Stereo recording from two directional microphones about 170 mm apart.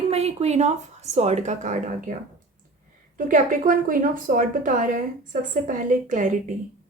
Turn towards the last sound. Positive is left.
turn(degrees=-50)  # may be behind; listen again after turning